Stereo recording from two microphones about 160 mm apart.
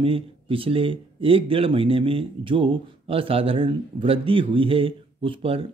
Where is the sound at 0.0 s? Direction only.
35° right (ahead or behind).